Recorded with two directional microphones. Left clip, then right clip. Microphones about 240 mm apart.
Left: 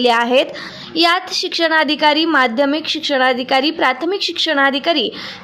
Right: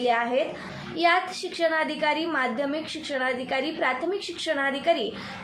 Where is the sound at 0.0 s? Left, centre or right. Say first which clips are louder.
Left 10 dB; left.